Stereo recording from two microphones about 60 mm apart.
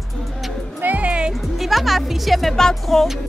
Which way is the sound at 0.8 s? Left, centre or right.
Right.